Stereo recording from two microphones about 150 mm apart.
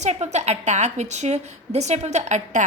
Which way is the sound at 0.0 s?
50° right (ahead or behind).